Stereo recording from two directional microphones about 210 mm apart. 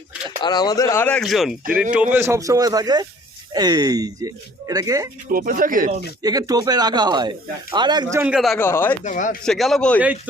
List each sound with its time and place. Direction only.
0.4 s speech: 20° left (ahead or behind); by 5.0 s 15° right (ahead or behind)
5.3 s speech: 40° right (ahead or behind)
6.2 s speech: 15° right (ahead or behind)
8.2 s a man's voice: 5° right (ahead or behind)
8.6 s speech: 10° left (ahead or behind)
9.0 s speech: 40° left (ahead or behind)
9.4 s a man's voice: centre (ahead or behind)